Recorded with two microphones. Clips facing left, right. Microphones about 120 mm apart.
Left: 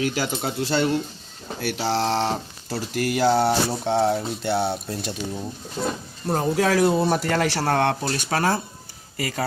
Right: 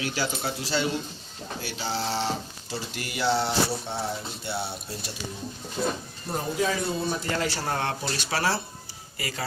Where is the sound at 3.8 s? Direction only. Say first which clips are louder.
Left 11 dB; 90° left.